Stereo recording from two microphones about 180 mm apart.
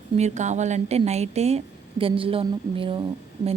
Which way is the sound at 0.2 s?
40° right (ahead or behind).